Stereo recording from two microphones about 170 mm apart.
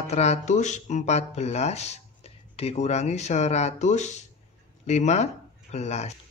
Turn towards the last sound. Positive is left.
turn(degrees=40)  # may be behind; listen again after turning